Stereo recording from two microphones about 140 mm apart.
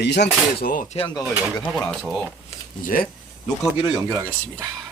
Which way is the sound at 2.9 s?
90° left.